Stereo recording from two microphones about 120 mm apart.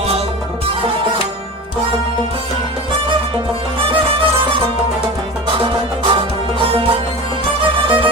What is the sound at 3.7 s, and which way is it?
Music, 50° right (ahead or behind).